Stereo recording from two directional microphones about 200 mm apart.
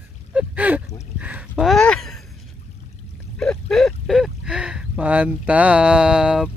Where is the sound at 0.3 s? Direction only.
5° right (ahead or behind).